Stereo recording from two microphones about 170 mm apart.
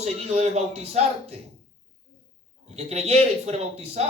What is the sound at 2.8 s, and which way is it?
Speech, 40° right (ahead or behind).